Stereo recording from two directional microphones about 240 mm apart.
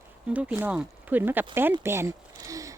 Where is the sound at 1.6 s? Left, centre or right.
Centre.